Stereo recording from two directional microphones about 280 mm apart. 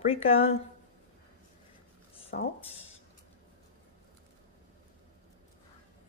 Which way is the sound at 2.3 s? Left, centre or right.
Left.